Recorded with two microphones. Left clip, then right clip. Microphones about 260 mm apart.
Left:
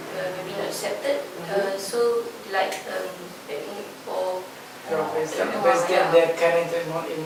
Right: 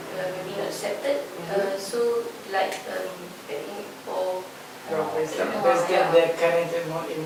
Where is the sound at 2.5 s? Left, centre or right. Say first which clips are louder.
Left 1 dB; centre.